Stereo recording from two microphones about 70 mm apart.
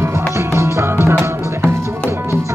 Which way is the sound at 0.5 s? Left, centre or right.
Right.